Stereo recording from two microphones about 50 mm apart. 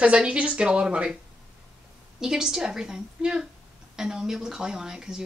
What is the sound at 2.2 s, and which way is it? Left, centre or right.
Speech, centre.